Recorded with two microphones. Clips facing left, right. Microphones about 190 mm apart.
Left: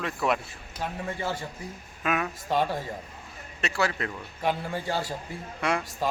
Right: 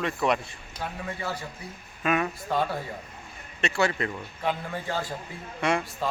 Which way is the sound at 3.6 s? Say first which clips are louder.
Right 2 dB; centre (ahead or behind).